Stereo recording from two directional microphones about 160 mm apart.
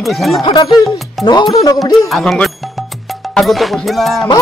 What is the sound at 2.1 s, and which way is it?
Speech, centre (ahead or behind).